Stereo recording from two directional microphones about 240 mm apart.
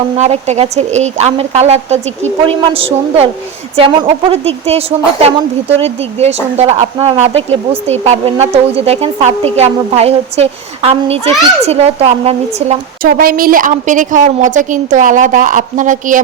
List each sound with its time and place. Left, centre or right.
0.2 s a woman's voice: right